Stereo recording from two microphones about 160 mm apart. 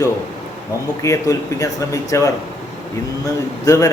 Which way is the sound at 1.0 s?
20° left (ahead or behind).